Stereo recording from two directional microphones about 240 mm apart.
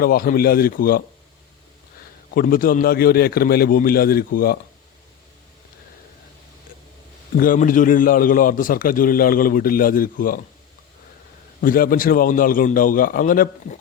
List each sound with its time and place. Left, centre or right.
0.0 s a man's voice: left
2.3 s a man's voice: left
7.3 s a man's voice: left
11.6 s a man's voice: left